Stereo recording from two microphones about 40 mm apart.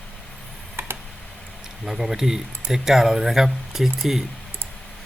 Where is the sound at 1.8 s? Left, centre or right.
Centre.